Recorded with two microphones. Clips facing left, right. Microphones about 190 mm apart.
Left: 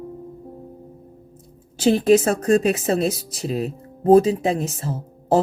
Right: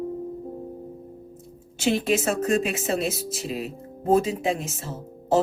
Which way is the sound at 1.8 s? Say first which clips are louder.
Left 7 dB; 35° left (ahead or behind).